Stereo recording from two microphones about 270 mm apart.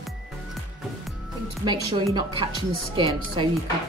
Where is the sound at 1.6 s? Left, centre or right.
Centre.